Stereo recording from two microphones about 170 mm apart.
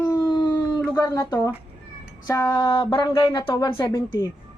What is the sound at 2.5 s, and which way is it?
Speech, 25° left (ahead or behind).